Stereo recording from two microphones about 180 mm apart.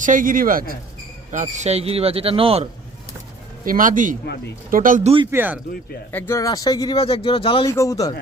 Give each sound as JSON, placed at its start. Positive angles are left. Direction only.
{"t": 0.0, "sound": "speech", "side_deg": -50}
{"t": 3.7, "sound": "speech", "side_deg": -45}
{"t": 5.3, "sound": "speech", "side_deg": -10}
{"t": 6.1, "sound": "speech", "side_deg": 10}
{"t": 6.9, "sound": "speech", "side_deg": 30}
{"t": 7.7, "sound": "speech", "side_deg": 15}